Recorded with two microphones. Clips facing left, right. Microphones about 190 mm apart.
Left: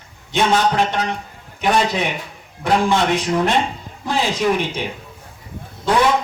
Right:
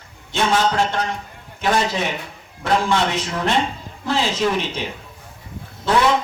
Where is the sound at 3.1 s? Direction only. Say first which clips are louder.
Left 3 dB; 15° left (ahead or behind).